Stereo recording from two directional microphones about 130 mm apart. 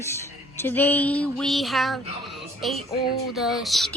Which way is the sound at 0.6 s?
15° left (ahead or behind).